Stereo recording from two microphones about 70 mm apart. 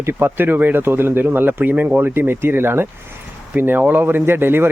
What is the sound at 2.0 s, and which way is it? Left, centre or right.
Speech, right.